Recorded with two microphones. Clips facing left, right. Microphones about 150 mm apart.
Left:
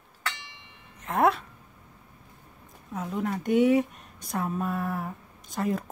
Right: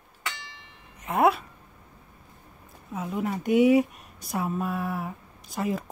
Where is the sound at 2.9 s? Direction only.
5° right (ahead or behind).